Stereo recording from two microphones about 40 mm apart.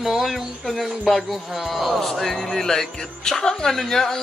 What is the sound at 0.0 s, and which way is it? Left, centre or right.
Speech, centre.